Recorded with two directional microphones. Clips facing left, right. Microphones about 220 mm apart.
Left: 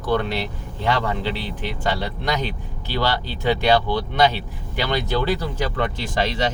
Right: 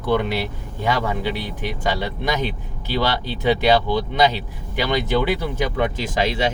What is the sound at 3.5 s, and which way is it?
Speech, 15° right (ahead or behind).